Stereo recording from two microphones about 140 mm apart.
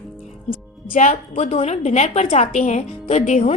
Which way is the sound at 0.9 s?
65° left (ahead or behind).